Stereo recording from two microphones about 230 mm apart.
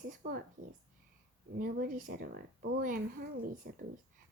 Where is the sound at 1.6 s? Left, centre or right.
Right.